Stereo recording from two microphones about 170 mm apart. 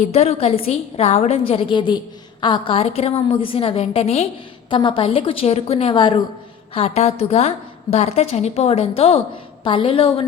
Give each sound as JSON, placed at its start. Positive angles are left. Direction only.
{"t": 0.1, "sound": "a woman's voice", "side_deg": 40}